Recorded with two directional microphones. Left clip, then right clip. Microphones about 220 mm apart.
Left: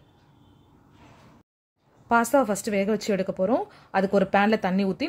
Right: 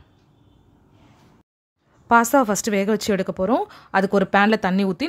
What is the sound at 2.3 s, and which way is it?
Speech, 20° right (ahead or behind).